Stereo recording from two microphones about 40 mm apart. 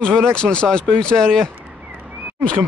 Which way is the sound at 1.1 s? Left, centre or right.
Centre.